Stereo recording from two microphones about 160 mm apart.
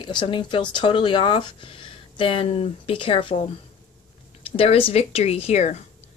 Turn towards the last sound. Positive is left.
turn(degrees=45)  # may be behind; listen again after turning